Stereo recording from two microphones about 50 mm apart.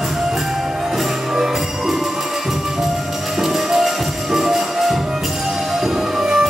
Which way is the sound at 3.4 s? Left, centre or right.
Centre.